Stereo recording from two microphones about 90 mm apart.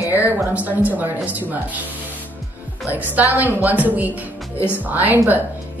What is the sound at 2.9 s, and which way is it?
Speech, 20° right (ahead or behind).